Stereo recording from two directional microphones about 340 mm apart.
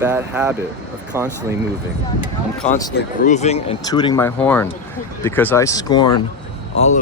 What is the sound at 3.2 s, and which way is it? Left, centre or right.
Speech, centre.